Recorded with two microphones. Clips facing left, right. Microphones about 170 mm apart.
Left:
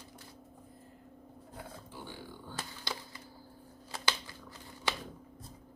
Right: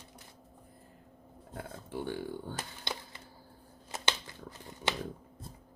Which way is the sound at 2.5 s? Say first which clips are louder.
Right 1 dB; 20° right (ahead or behind).